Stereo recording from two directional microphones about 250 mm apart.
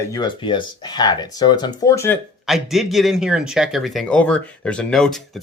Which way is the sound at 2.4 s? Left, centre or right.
Centre.